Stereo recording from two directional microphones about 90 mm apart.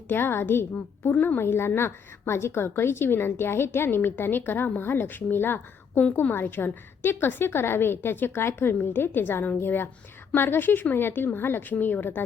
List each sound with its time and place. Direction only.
0.1 s a woman's voice: 25° left (ahead or behind)